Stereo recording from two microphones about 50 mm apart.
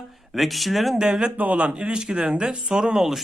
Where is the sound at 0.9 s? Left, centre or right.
Centre.